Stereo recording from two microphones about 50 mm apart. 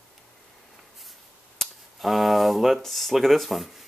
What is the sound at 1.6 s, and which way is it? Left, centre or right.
Speech, centre.